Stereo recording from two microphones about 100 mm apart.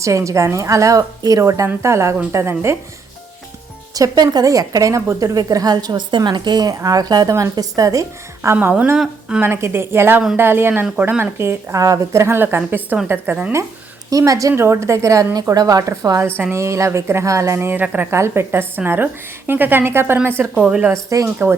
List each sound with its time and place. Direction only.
0.0 s a woman's voice: 30° right (ahead or behind)
3.9 s a woman's voice: 40° right (ahead or behind)
8.5 s a woman's voice: 10° right (ahead or behind)
9.4 s a woman's voice: 25° right (ahead or behind)
14.1 s a woman's voice: 35° right (ahead or behind); by 20.9 s 10° right (ahead or behind)
20.9 s a woman's voice: 35° right (ahead or behind)